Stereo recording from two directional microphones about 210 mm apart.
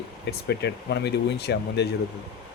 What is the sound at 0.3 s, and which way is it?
Speech, 50° left (ahead or behind).